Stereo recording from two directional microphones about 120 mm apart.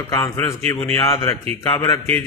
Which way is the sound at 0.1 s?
25° left (ahead or behind).